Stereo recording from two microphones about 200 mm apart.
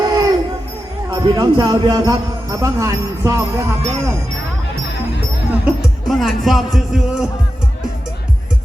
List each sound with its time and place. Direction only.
0.0 s a sound: 20° right (ahead or behind)
1.1 s speech: 20° right (ahead or behind)
5.5 s speech: 5° right (ahead or behind)